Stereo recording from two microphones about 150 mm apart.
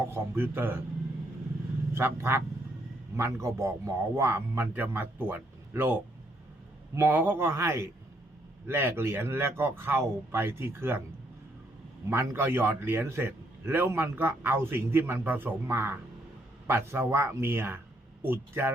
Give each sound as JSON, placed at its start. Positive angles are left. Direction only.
{"t": 0.0, "sound": "a man's voice", "side_deg": -15}
{"t": 1.9, "sound": "a man's voice", "side_deg": -15}
{"t": 12.0, "sound": "a man's voice", "side_deg": -15}